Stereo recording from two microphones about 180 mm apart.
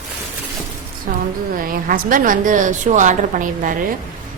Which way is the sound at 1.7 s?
50° right (ahead or behind).